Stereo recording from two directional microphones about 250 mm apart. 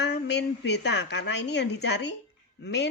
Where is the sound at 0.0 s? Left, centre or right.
Left.